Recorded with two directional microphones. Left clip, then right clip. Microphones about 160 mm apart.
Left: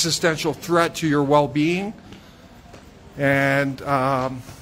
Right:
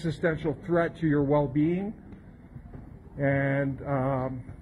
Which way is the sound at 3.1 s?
35° left (ahead or behind).